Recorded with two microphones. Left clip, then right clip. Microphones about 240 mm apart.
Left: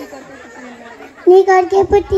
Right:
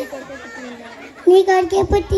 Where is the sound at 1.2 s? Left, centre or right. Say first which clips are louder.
Left 3 dB; right.